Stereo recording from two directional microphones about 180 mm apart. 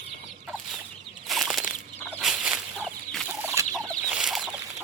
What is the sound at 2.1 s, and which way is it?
Turkey, 5° right (ahead or behind).